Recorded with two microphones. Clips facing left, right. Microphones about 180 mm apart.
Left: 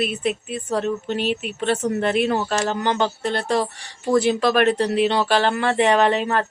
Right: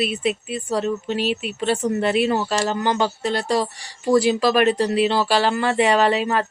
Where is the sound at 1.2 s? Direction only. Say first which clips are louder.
Even; 50° left (ahead or behind).